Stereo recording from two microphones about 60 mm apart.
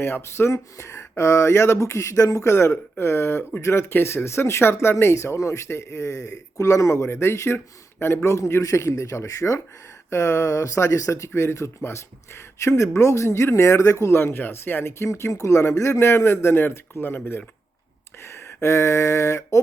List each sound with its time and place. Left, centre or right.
0.0 s a man's voice: left
2.5 s a man's voice: left
5.1 s a man's voice: left
18.2 s a sound: left